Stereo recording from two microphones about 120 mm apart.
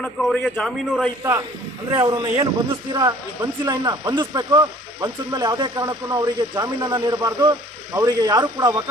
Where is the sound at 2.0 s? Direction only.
40° right (ahead or behind).